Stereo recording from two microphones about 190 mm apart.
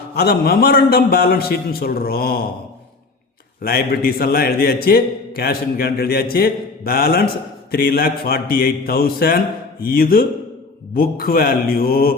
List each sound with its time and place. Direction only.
0.2 s a man's voice: 55° left (ahead or behind)
3.6 s a man's voice: 55° left (ahead or behind)